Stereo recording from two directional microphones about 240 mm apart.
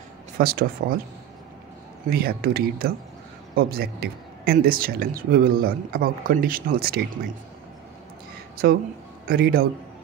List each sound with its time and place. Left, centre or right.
0.4 s speech: right
2.0 s speech: right
9.3 s speech: right